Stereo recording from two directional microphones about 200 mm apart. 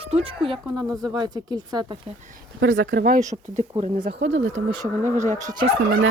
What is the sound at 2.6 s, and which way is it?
Fowl, 70° right (ahead or behind).